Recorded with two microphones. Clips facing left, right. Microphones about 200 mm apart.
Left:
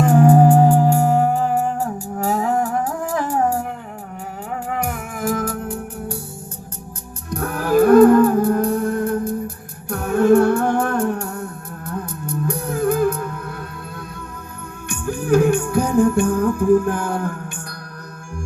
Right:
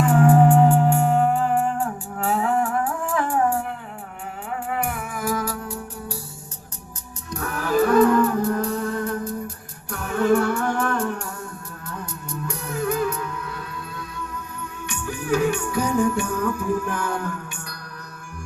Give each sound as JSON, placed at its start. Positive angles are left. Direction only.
{"t": 0.0, "sound": "music", "side_deg": 40}
{"t": 4.8, "sound": "music", "side_deg": 45}
{"t": 7.3, "sound": "music", "side_deg": 55}
{"t": 14.8, "sound": "music", "side_deg": 55}